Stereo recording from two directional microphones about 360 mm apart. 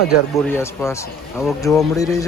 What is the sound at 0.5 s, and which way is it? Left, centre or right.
A man's voice, centre.